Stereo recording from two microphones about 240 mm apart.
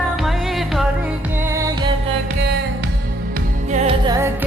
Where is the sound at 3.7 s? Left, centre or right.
Right.